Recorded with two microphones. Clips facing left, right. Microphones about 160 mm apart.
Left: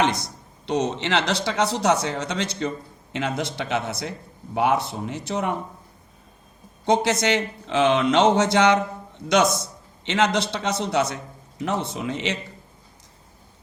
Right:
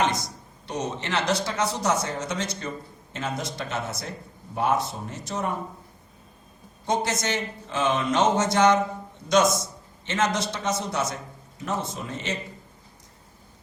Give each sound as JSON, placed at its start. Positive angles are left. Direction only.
{"t": 0.6, "sound": "speech", "side_deg": 70}
{"t": 6.8, "sound": "speech", "side_deg": 70}
{"t": 10.1, "sound": "speech", "side_deg": 70}